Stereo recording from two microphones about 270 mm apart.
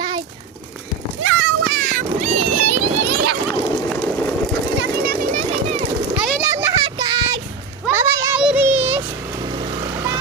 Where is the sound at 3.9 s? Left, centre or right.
Centre.